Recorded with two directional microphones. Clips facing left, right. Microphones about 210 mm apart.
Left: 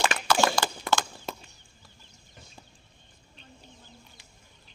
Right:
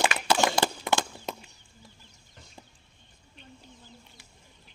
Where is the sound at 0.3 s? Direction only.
20° right (ahead or behind).